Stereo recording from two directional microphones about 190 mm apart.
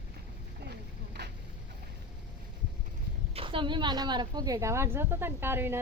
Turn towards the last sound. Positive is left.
turn(degrees=-10)  # may be behind; listen again after turning